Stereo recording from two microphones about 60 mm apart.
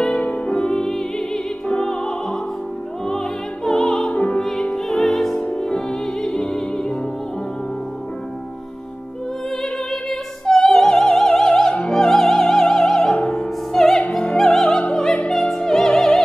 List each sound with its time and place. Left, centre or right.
0.0 s music: centre
4.1 s music: left
4.4 s music: centre
9.6 s opera: centre
15.2 s music: centre